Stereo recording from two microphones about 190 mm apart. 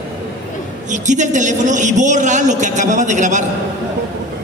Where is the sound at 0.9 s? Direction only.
40° right (ahead or behind).